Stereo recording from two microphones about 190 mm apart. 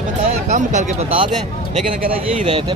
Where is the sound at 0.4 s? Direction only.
40° right (ahead or behind).